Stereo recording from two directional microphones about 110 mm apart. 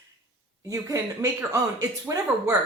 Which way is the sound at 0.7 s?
25° right (ahead or behind).